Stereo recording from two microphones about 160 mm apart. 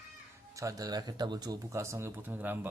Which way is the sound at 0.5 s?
20° right (ahead or behind).